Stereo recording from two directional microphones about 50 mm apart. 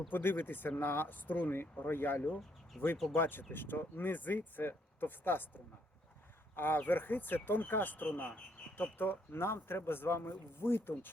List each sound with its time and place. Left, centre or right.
0.1 s speech: left
2.8 s speech: centre
3.2 s speech: left